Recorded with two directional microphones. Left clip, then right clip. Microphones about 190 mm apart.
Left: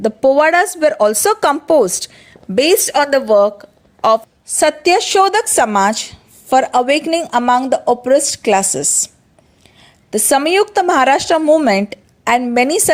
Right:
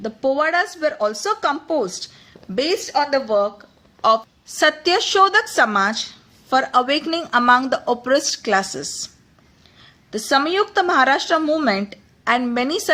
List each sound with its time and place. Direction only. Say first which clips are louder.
0.0 s speech: left 8 dB; 40° left (ahead or behind)
4.4 s a woman's voice: left 4 dB; 25° left (ahead or behind)